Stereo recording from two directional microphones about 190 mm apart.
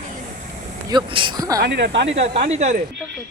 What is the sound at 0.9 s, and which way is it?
Speech, 25° right (ahead or behind).